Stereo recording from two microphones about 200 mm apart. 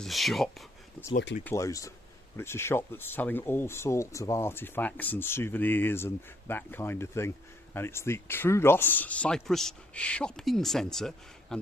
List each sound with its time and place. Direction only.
0.0 s speech: centre (ahead or behind)